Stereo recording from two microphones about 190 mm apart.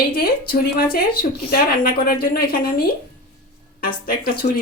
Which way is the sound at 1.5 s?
50° left (ahead or behind).